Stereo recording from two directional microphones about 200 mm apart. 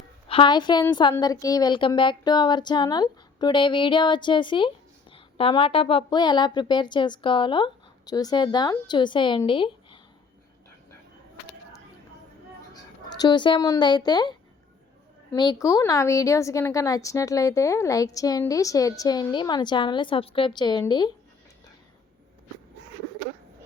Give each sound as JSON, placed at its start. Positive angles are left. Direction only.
{"t": 0.3, "sound": "a woman's voice", "side_deg": 25}
{"t": 13.1, "sound": "a woman's voice", "side_deg": 20}